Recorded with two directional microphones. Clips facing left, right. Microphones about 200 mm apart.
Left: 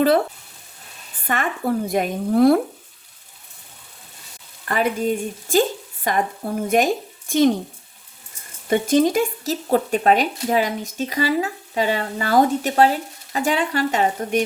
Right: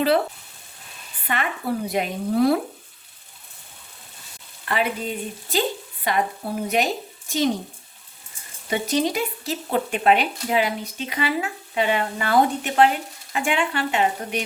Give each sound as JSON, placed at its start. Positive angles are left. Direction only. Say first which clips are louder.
{"t": 1.3, "sound": "a woman's voice", "louder": "left 3 dB", "side_deg": 45}
{"t": 4.7, "sound": "a woman's voice", "louder": "left 4 dB", "side_deg": 45}
{"t": 8.6, "sound": "speech", "louder": "left 6 dB", "side_deg": 50}